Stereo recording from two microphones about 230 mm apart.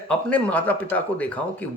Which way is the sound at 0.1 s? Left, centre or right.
Centre.